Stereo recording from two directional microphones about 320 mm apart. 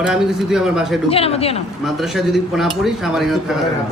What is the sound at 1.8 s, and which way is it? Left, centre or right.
A woman's voice, centre.